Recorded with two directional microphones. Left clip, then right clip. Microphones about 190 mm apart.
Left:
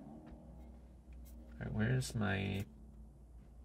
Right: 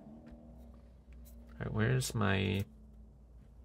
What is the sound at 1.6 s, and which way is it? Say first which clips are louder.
Speech: right 5 dB; 50° right (ahead or behind).